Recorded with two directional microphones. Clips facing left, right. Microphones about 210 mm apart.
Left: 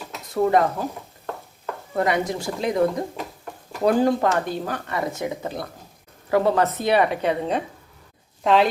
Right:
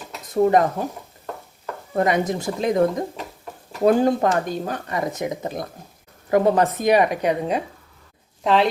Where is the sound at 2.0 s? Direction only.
20° right (ahead or behind).